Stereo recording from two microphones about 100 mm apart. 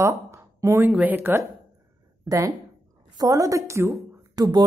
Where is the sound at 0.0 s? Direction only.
30° right (ahead or behind).